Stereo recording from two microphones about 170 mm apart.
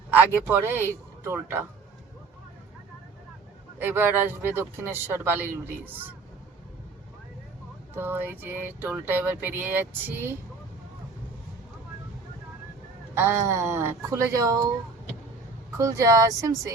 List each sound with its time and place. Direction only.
0.1 s speech: 10° right (ahead or behind)
3.8 s speech: 10° right (ahead or behind)
7.9 s speech: 10° right (ahead or behind)
13.1 s speech: 15° right (ahead or behind)
15.8 s speech: 20° right (ahead or behind)